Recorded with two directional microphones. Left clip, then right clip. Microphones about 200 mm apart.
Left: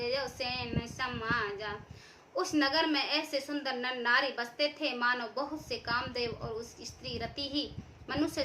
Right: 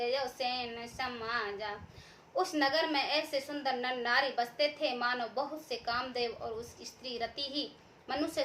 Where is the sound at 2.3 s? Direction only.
15° left (ahead or behind).